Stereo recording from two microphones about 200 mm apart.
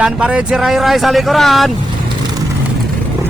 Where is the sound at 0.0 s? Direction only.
5° right (ahead or behind).